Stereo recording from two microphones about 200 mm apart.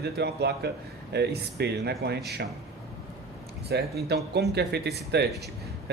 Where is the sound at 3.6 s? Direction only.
55° right (ahead or behind).